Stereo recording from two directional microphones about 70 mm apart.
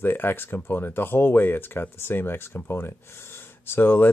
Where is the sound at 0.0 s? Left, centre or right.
Left.